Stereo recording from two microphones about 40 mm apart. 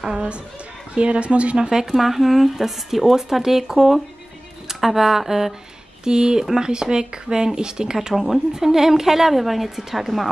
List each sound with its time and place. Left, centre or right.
0.9 s speech: right
1.7 s a woman's voice: centre